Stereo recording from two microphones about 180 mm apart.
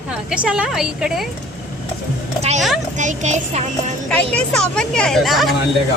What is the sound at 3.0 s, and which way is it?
Speech, 40° right (ahead or behind).